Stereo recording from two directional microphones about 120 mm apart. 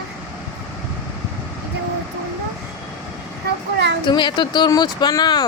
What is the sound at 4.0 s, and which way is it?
Speech, 40° left (ahead or behind).